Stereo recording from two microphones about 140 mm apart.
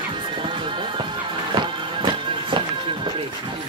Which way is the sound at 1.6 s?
35° right (ahead or behind).